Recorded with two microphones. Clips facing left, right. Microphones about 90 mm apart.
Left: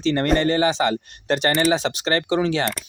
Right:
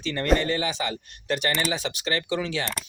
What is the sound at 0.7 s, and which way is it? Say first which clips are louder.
Speech: left 9 dB; 85° left.